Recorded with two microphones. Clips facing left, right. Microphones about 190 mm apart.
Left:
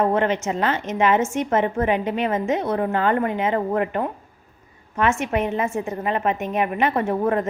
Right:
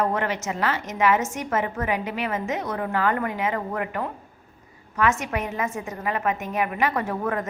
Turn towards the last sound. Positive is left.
turn(degrees=25)  # may be behind; listen again after turning